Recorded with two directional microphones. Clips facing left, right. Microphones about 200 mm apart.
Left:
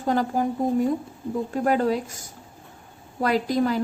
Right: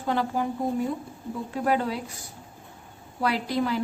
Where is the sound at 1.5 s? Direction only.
45° left (ahead or behind).